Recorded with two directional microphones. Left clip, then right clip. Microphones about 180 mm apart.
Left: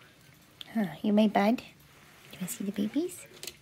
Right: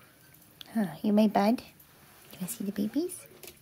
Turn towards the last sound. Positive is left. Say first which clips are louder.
# even
turn(degrees=-5)  # may be behind; listen again after turning